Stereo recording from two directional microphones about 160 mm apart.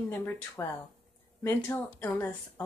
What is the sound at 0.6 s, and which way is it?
A woman's voice, 20° left (ahead or behind).